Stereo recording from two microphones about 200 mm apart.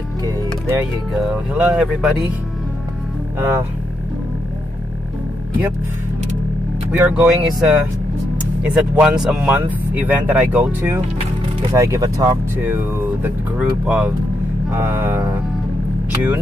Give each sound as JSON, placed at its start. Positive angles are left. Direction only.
{"t": 0.2, "sound": "speech", "side_deg": -15}
{"t": 1.1, "sound": "speech", "side_deg": -5}
{"t": 3.3, "sound": "speech", "side_deg": -10}
{"t": 6.9, "sound": "speech", "side_deg": -5}